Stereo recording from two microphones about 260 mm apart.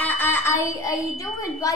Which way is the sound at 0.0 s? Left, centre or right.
Centre.